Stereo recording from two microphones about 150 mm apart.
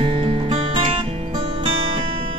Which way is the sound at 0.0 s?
35° right (ahead or behind).